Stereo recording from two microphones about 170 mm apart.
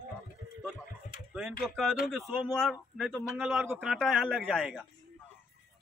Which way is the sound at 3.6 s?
15° right (ahead or behind).